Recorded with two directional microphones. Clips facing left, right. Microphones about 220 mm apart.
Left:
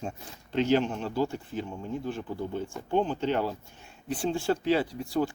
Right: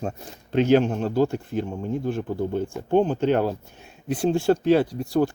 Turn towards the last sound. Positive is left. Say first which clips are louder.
# right 6 dB
turn(degrees=-45)  # may be behind; listen again after turning